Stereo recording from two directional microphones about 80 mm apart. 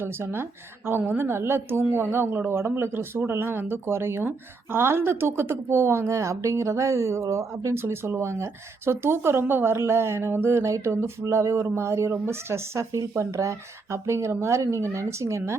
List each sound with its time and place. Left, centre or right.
0.0 s speech: right